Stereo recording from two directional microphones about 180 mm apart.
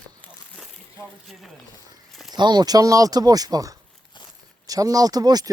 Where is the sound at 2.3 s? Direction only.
25° right (ahead or behind).